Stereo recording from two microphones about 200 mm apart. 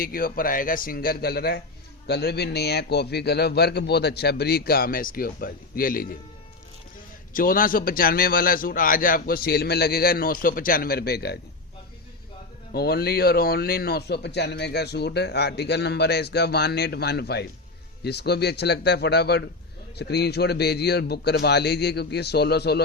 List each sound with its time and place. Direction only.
0.0 s a man's voice: 45° left (ahead or behind)
7.3 s a man's voice: 45° left (ahead or behind)
12.7 s a man's voice: 50° left (ahead or behind)